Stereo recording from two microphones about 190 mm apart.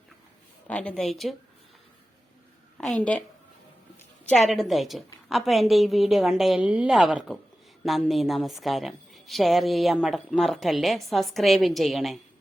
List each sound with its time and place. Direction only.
0.7 s a woman's voice: 5° left (ahead or behind)
2.7 s a woman's voice: 5° left (ahead or behind)
4.3 s a woman's voice: centre (ahead or behind)